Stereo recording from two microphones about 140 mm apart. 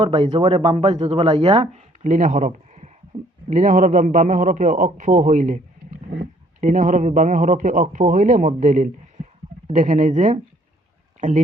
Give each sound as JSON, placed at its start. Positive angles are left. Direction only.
{"t": 0.0, "sound": "speech", "side_deg": -35}
{"t": 0.4, "sound": "speech", "side_deg": -45}
{"t": 3.1, "sound": "a sound", "side_deg": -45}
{"t": 3.5, "sound": "a man's voice", "side_deg": -65}
{"t": 6.6, "sound": "a man's voice", "side_deg": -65}